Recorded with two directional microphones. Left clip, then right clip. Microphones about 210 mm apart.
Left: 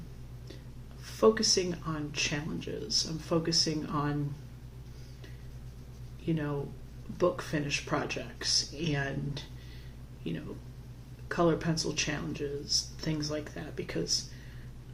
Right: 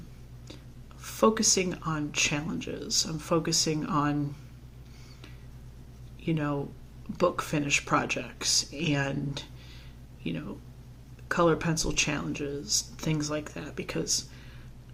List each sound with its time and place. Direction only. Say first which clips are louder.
1.2 s speech: right 1 dB; 50° right (ahead or behind)
6.2 s speech: right 3 dB; 50° right (ahead or behind)
11.3 s speech: right 4 dB; 50° right (ahead or behind)